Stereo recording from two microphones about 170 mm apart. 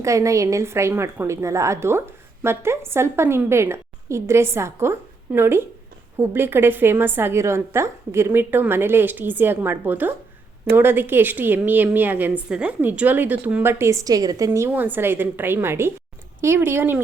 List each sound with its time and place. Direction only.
0.0 s a woman's voice: 20° right (ahead or behind)